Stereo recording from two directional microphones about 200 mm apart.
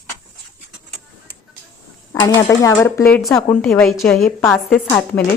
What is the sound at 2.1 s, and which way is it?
A woman's voice, 20° left (ahead or behind).